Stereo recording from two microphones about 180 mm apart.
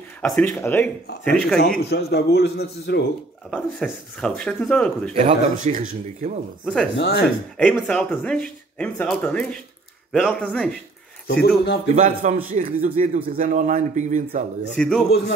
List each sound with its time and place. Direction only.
0.2 s speech: 10° left (ahead or behind)
1.9 s a man's voice: 60° left (ahead or behind)
3.4 s speech: 5° left (ahead or behind)
5.2 s speech: 45° right (ahead or behind)
6.6 s speech: 5° left (ahead or behind)
7.0 s a man's voice: 65° left (ahead or behind)
7.5 s speech: 5° left (ahead or behind)
11.4 s a man's voice: 65° left (ahead or behind)
11.9 s a man's voice: 40° right (ahead or behind)
14.8 s speech: 5° left (ahead or behind)